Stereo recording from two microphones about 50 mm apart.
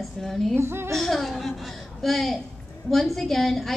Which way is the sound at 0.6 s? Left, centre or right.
Right.